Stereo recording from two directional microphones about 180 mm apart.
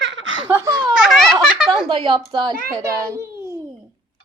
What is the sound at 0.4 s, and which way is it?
Speech, 15° right (ahead or behind).